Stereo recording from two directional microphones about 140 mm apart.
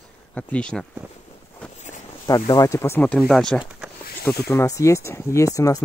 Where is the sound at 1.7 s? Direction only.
55° left (ahead or behind).